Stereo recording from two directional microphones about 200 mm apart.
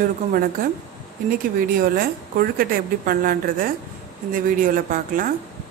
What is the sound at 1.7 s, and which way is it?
A woman's voice, 45° right (ahead or behind).